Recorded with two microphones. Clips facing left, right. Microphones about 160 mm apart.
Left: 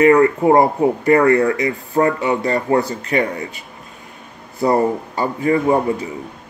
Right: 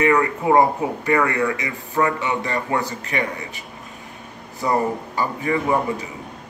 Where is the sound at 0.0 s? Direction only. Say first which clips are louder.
Left 7 dB; 35° left (ahead or behind).